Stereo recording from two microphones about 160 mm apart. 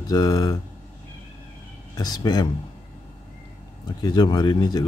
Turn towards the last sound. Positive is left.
turn(degrees=25)  # may be behind; listen again after turning